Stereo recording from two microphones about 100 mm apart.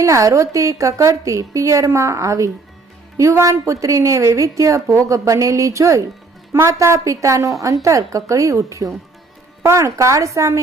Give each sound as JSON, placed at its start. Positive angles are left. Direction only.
{"t": 0.0, "sound": "a woman's voice", "side_deg": -30}